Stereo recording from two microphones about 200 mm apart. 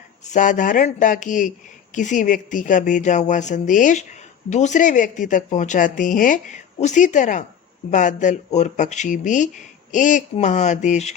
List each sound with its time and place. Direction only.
0.3 s speech: 40° left (ahead or behind)